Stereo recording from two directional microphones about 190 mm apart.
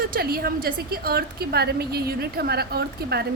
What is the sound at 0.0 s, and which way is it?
A woman's voice, 55° right (ahead or behind).